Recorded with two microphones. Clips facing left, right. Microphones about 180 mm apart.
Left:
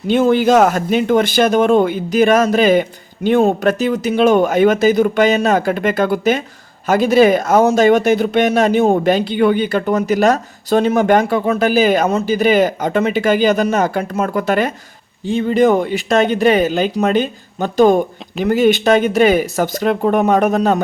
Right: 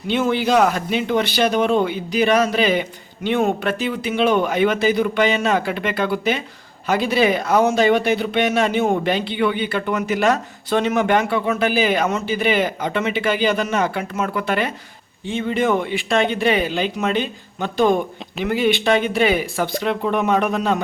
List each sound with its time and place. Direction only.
0.1 s speech: 45° left (ahead or behind)